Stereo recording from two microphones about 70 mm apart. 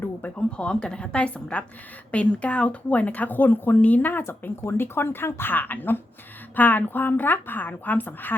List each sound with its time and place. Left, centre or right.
0.3 s a woman's voice: centre